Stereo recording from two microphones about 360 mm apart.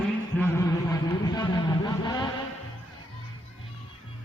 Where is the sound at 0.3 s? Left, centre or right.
Centre.